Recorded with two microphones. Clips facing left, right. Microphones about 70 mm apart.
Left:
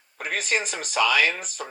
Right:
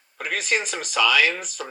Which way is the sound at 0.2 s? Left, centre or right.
Left.